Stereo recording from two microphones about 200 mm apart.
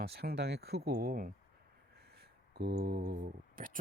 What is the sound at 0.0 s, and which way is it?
Speech, 50° right (ahead or behind).